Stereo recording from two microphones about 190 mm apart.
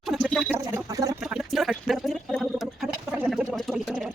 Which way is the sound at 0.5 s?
15° right (ahead or behind).